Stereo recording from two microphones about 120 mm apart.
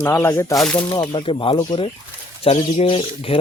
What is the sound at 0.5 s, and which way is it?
Speech, 5° left (ahead or behind).